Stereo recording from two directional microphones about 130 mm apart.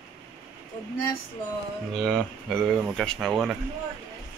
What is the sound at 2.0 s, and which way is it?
Speech, 5° left (ahead or behind).